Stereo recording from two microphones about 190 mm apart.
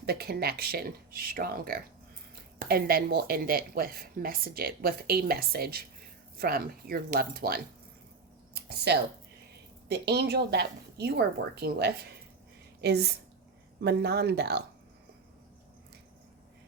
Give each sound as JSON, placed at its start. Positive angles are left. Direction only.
{"t": 0.0, "sound": "a woman's voice", "side_deg": -55}